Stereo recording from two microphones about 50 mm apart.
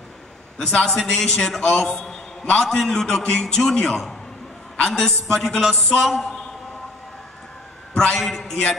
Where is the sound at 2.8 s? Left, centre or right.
Centre.